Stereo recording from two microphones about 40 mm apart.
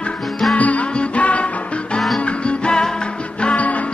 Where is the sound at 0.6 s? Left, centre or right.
Left.